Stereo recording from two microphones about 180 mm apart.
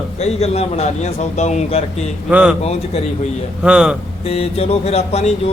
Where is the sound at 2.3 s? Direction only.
5° right (ahead or behind).